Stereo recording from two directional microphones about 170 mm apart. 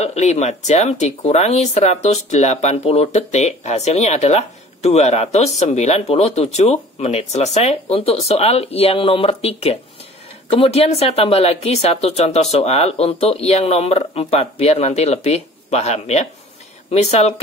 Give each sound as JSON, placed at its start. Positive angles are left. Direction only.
{"t": 0.0, "sound": "speech", "side_deg": 40}